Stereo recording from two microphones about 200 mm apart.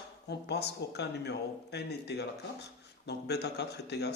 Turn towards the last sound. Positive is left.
turn(degrees=55)  # may be behind; listen again after turning